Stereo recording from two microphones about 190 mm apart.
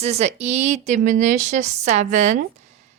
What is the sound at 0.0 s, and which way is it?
Speech, 35° right (ahead or behind).